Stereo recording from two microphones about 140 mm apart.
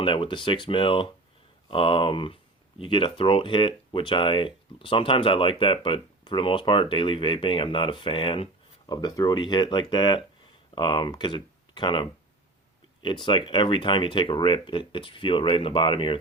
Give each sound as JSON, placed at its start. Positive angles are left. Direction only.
{"t": 0.0, "sound": "speech", "side_deg": 35}